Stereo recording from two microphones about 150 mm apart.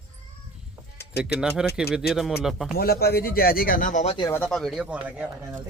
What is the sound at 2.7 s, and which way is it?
Speech, 90° left.